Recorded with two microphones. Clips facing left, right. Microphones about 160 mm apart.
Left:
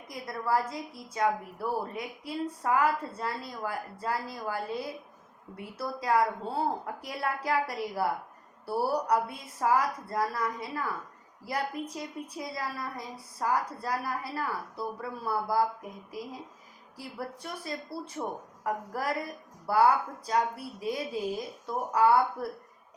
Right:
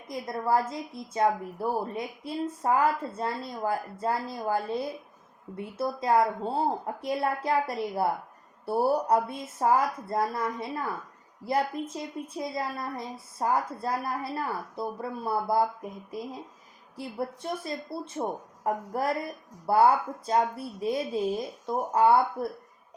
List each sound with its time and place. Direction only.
0.1 s a woman's voice: 25° right (ahead or behind)
17.0 s a woman's voice: 25° right (ahead or behind)